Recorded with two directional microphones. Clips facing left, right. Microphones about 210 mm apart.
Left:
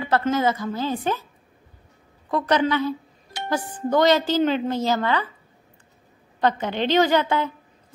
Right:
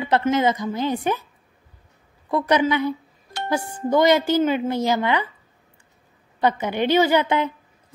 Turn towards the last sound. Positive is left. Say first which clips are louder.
# right 1 dB
turn(degrees=-20)  # may be behind; listen again after turning